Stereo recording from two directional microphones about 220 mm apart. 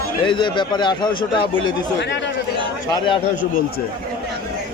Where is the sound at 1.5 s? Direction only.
55° left (ahead or behind).